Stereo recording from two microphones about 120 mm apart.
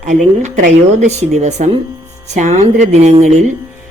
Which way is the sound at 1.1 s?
75° right (ahead or behind).